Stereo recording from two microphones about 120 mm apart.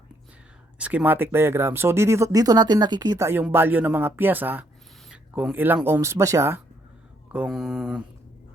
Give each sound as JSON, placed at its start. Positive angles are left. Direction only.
{"t": 0.8, "sound": "speech", "side_deg": -10}
{"t": 7.3, "sound": "mantra", "side_deg": -5}